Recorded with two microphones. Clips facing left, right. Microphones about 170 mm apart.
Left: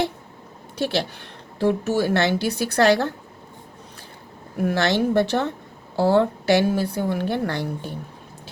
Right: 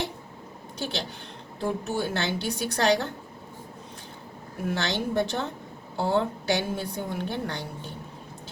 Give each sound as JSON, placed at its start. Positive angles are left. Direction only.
{"t": 0.8, "sound": "a woman's voice", "side_deg": 70}
{"t": 4.6, "sound": "a woman's voice", "side_deg": 70}